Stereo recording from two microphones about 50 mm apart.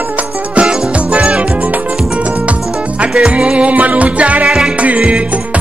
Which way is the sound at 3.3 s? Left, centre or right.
Right.